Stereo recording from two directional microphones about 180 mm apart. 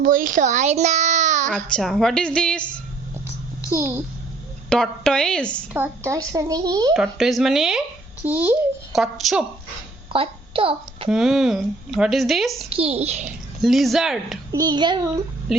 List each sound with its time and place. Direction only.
0.0 s a child's voice: 50° right (ahead or behind)
1.5 s a child's voice: 5° left (ahead or behind)
4.7 s a child's voice: 5° left (ahead or behind)
5.7 s speech: 15° right (ahead or behind)
6.9 s a child's voice: centre (ahead or behind)
8.9 s a child's voice: centre (ahead or behind)
10.1 s a child's voice: 30° right (ahead or behind)
11.1 s a child's voice: centre (ahead or behind)
12.7 s a woman's voice: 35° right (ahead or behind)
13.6 s a child's voice: centre (ahead or behind)
14.5 s speech: 20° right (ahead or behind)